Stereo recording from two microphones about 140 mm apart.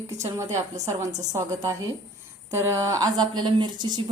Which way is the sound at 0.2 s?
20° right (ahead or behind).